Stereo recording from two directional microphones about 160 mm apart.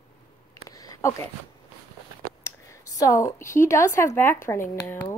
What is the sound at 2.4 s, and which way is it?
Speech, 20° left (ahead or behind).